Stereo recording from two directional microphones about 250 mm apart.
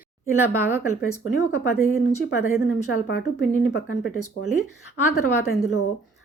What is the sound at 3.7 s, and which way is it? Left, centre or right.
Speech, left.